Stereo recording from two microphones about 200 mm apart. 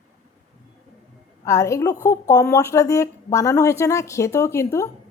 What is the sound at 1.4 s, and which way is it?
A woman's voice, 15° left (ahead or behind).